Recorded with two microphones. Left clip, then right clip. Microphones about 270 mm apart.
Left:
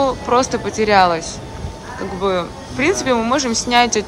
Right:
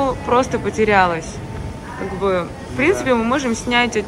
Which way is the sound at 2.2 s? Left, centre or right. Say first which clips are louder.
Even; centre.